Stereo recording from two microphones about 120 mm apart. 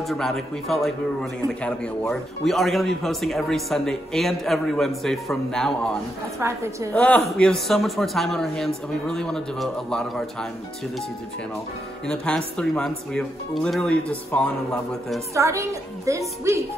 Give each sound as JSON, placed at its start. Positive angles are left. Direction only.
{"t": 0.0, "sound": "a man's voice", "side_deg": 0}
{"t": 6.4, "sound": "a woman's voice", "side_deg": -25}
{"t": 6.9, "sound": "a man's voice", "side_deg": 15}
{"t": 12.1, "sound": "speech", "side_deg": 5}
{"t": 15.3, "sound": "a woman's voice", "side_deg": -25}